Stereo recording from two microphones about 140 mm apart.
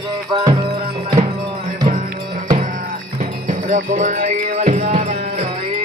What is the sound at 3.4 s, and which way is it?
Music, 65° right (ahead or behind).